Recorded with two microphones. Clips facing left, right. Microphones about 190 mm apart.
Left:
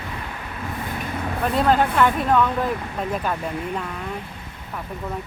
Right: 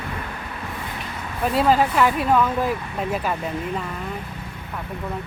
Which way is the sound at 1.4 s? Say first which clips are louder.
Right 1 dB; 5° right (ahead or behind).